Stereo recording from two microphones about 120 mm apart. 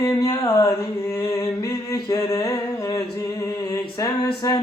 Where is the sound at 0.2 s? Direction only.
30° left (ahead or behind).